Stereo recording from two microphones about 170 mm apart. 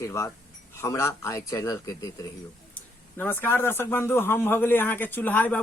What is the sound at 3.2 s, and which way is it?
A man's voice, 15° left (ahead or behind).